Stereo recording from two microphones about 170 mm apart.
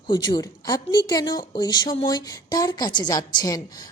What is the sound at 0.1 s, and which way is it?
Speech, 25° left (ahead or behind).